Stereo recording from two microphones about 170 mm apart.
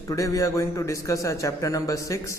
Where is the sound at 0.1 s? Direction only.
20° left (ahead or behind).